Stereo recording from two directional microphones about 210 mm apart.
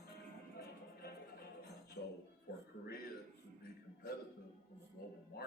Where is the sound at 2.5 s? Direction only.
50° left (ahead or behind).